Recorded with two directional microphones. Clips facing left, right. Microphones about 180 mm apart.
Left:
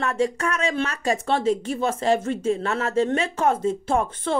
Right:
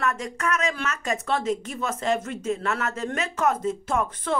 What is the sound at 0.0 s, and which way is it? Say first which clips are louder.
Speech: left 4 dB; 30° left (ahead or behind).